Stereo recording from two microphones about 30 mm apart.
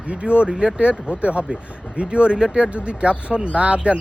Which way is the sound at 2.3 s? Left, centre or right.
Right.